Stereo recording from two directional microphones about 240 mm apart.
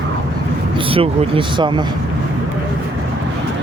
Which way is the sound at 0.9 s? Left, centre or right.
Right.